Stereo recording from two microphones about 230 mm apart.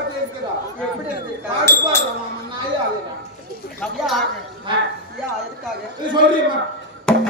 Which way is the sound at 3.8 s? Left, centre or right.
Centre.